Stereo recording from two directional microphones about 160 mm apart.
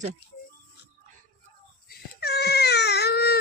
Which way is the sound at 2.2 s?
90° left.